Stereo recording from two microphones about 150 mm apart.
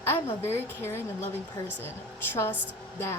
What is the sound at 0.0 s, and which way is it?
A woman's voice, 15° left (ahead or behind).